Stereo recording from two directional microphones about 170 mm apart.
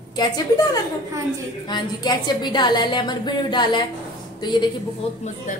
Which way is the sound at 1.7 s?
25° left (ahead or behind).